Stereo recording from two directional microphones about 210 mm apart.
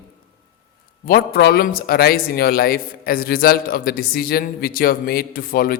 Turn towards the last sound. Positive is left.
turn(degrees=45)  # may be behind; listen again after turning